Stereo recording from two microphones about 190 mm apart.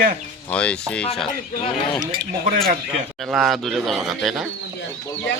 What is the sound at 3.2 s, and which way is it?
Speech, centre (ahead or behind).